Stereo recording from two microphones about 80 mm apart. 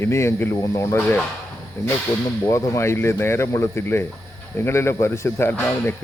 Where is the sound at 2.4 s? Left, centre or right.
Left.